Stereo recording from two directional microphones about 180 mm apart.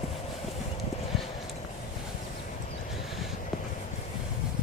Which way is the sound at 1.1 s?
Centre (ahead or behind).